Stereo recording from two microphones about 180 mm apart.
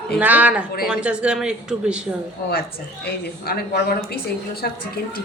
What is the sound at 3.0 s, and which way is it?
A woman's voice, 60° left (ahead or behind).